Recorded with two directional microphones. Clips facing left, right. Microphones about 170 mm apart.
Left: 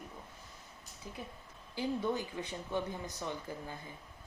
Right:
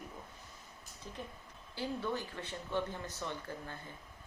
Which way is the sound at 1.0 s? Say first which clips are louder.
Even; 10° left (ahead or behind).